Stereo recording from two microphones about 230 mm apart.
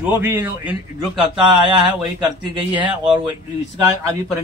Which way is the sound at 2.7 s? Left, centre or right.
Centre.